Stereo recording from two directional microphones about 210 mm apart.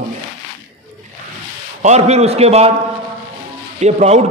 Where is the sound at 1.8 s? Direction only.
35° right (ahead or behind).